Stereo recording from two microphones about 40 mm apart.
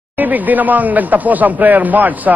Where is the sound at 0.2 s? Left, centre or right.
Right.